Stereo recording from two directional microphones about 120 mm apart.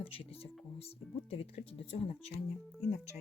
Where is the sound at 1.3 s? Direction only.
55° left (ahead or behind).